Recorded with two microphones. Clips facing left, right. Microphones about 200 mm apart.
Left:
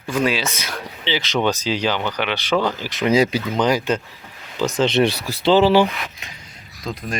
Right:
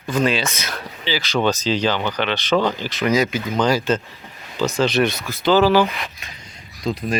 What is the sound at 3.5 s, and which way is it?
Speech, 15° left (ahead or behind).